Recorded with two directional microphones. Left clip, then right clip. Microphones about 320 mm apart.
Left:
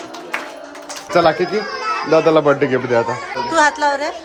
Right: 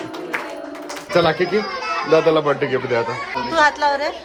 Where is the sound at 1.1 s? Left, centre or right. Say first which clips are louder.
Left 2 dB; left.